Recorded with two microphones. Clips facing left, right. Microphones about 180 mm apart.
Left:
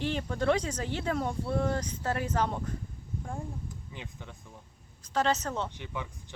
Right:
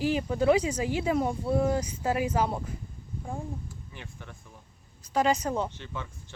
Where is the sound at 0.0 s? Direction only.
5° right (ahead or behind).